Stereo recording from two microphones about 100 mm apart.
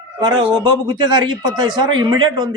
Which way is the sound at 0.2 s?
50° right (ahead or behind).